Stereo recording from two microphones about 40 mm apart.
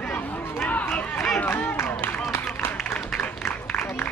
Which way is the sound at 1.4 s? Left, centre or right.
Left.